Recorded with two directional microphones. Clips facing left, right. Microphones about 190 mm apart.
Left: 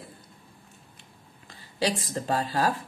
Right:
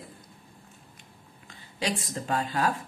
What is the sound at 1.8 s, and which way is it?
Speech, 35° left (ahead or behind).